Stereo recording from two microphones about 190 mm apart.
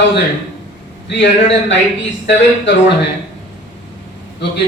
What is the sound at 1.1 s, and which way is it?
Speech, 65° left (ahead or behind).